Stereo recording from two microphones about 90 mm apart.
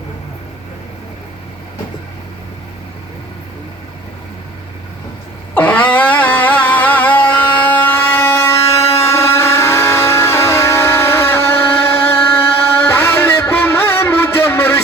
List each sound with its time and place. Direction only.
5.5 s music: 20° left (ahead or behind)